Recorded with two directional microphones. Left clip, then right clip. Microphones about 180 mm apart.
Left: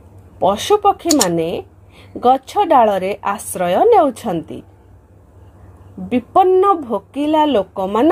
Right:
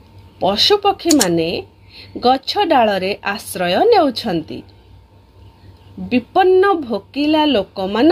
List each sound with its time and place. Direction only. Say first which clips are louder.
0.4 s speech: even; centre (ahead or behind)
3.8 s speech: left 1 dB; 5° right (ahead or behind)
6.0 s speech: left 1 dB; 5° left (ahead or behind)